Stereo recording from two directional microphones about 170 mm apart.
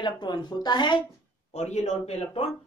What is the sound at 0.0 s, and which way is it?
Speech, 25° left (ahead or behind).